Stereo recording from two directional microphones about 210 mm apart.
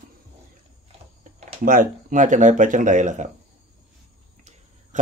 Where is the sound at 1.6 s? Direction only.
40° right (ahead or behind).